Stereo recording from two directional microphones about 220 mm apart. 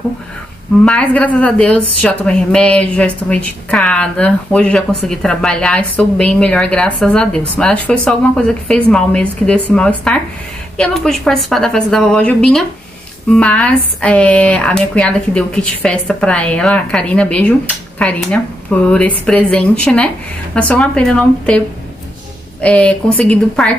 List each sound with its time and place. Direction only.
0.8 s speech: 5° left (ahead or behind)